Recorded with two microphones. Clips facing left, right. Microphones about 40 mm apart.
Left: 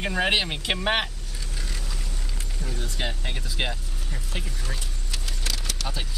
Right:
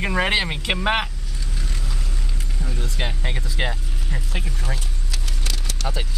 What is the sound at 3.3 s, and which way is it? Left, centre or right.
Speech, right.